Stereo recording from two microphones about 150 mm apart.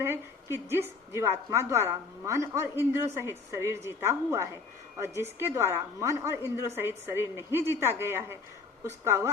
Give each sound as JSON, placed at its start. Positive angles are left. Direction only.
{"t": 0.5, "sound": "a woman's voice", "side_deg": -15}